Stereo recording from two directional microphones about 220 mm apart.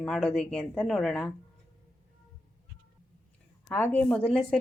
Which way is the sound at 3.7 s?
10° left (ahead or behind).